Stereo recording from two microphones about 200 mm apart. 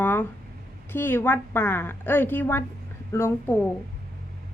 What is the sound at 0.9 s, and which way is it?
A woman's voice, 10° left (ahead or behind).